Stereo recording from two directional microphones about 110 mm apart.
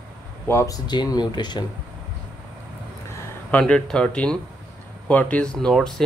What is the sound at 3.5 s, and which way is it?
Speech, 10° left (ahead or behind).